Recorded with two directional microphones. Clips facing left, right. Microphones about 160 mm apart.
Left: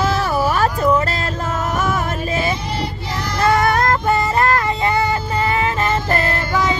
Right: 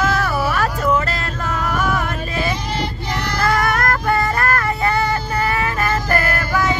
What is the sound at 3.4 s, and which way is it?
Child singing, 25° left (ahead or behind).